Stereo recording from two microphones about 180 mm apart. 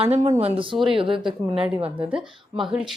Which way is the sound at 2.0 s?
5° right (ahead or behind).